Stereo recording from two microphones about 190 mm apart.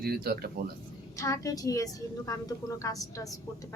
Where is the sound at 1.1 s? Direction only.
15° left (ahead or behind).